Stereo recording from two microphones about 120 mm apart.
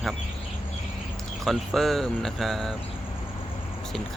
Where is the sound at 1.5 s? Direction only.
Centre (ahead or behind).